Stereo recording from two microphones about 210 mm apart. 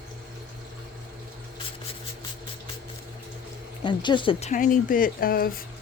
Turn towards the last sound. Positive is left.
turn(degrees=45)  # may be behind; listen again after turning